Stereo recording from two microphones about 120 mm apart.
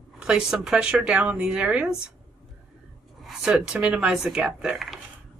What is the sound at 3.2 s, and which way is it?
Speech, 5° right (ahead or behind).